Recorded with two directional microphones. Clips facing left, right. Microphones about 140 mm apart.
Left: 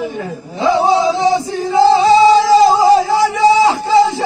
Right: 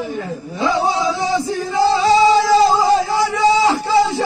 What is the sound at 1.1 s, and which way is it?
Music, 20° left (ahead or behind).